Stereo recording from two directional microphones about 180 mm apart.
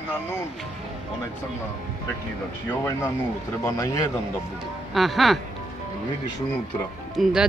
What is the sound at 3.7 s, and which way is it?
Speech, 20° left (ahead or behind).